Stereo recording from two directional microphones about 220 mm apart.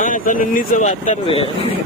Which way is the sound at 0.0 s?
35° left (ahead or behind).